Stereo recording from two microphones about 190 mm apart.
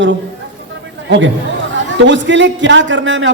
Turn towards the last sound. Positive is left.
turn(degrees=-75)  # may be behind; listen again after turning